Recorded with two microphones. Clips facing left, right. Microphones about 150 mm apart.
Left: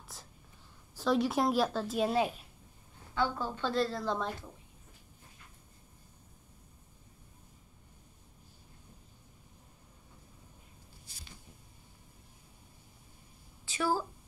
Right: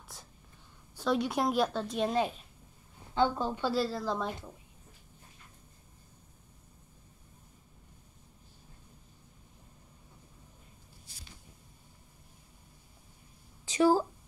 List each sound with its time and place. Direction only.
0.1 s whispering: centre (ahead or behind)
0.9 s a woman's voice: centre (ahead or behind)
3.2 s a woman's voice: 20° right (ahead or behind); by 4.3 s centre (ahead or behind)
13.7 s a sound: 20° right (ahead or behind)